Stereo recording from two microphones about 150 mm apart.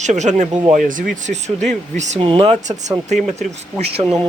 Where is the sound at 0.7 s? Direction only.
65° right (ahead or behind).